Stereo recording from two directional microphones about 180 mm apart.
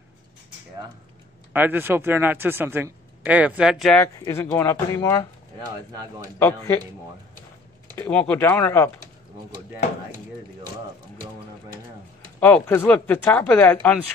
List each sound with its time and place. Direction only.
1.5 s speech: 10° right (ahead or behind)
4.3 s speech: 15° left (ahead or behind)
6.4 s speech: 10° left (ahead or behind)
8.0 s speech: 10° left (ahead or behind)
12.4 s speech: 10° left (ahead or behind)